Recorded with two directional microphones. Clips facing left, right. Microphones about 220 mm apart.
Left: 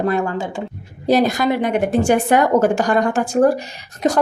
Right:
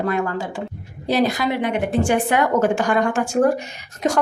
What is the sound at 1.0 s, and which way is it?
A woman's voice, 45° left (ahead or behind).